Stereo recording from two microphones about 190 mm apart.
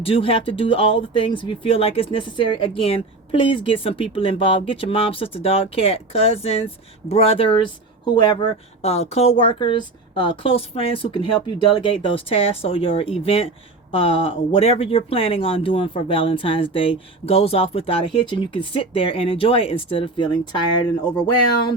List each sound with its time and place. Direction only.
0.0 s speech: 30° left (ahead or behind)